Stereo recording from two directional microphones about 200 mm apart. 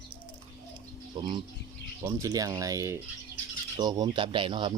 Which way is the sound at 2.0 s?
15° right (ahead or behind).